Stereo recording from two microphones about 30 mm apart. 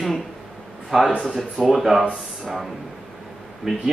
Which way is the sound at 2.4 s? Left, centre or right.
Centre.